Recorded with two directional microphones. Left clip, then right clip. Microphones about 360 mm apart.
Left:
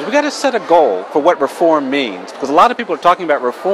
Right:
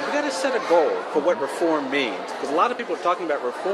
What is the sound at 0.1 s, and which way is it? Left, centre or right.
A man's voice, left.